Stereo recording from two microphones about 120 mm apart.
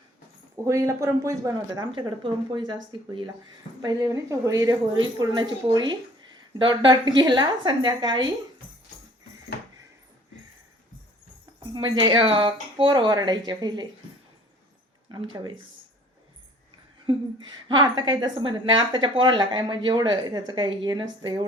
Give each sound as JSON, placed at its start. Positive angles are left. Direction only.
{"t": 0.5, "sound": "speech", "side_deg": -25}
{"t": 2.0, "sound": "a woman's voice", "side_deg": -35}
{"t": 3.8, "sound": "a woman's voice", "side_deg": -30}
{"t": 11.7, "sound": "a woman's voice", "side_deg": -40}
{"t": 15.1, "sound": "a woman's voice", "side_deg": -40}
{"t": 17.1, "sound": "a woman's voice", "side_deg": -40}